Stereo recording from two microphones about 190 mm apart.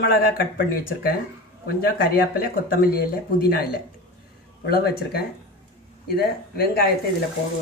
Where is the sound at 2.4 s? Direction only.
50° left (ahead or behind).